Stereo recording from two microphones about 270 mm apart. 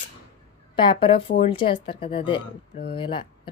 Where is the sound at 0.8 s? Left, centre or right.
Centre.